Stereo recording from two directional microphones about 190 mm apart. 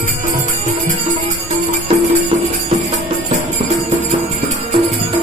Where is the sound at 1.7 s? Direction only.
35° right (ahead or behind).